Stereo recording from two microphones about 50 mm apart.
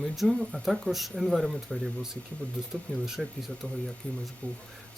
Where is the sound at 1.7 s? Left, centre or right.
Centre.